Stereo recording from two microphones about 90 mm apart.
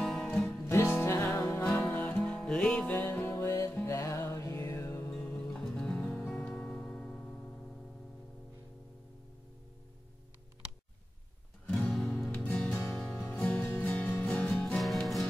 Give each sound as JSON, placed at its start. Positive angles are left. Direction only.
{"t": 0.0, "sound": "music", "side_deg": 5}
{"t": 0.7, "sound": "music", "side_deg": 30}
{"t": 1.6, "sound": "music", "side_deg": 10}
{"t": 3.8, "sound": "music", "side_deg": 35}
{"t": 5.5, "sound": "music", "side_deg": 10}
{"t": 6.0, "sound": "music", "side_deg": 25}
{"t": 6.3, "sound": "music", "side_deg": 10}
{"t": 11.6, "sound": "music", "side_deg": 15}
{"t": 11.9, "sound": "music", "side_deg": 0}
{"t": 12.3, "sound": "music", "side_deg": 20}
{"t": 12.9, "sound": "music", "side_deg": 5}
{"t": 14.5, "sound": "music", "side_deg": 5}